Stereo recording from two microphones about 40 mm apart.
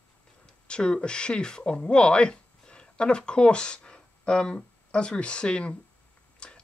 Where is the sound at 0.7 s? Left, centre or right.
Left.